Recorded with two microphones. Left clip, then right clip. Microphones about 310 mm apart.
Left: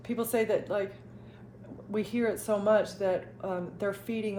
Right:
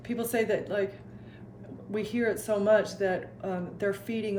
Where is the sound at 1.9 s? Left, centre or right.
Centre.